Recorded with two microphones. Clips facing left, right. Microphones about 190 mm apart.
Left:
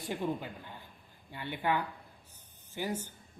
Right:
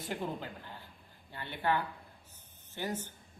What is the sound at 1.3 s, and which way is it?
Speech, 15° left (ahead or behind).